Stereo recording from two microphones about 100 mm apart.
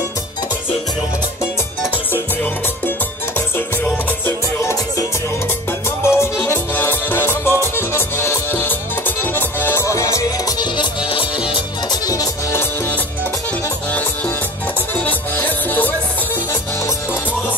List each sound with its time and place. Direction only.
3.3 s music: 20° left (ahead or behind)
6.0 s music: 25° left (ahead or behind)
10.6 s music: 55° left (ahead or behind)
11.9 s music: 40° left (ahead or behind)
15.0 s music: 15° left (ahead or behind)